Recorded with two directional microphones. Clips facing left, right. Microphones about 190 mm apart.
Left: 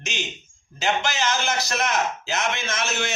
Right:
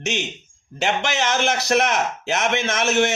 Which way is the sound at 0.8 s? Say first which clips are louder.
Right 2 dB; 75° right (ahead or behind).